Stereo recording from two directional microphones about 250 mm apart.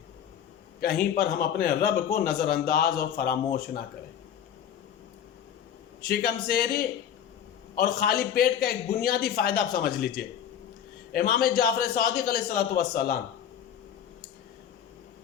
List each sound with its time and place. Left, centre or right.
1.1 s a man's voice: left
6.1 s a man's voice: left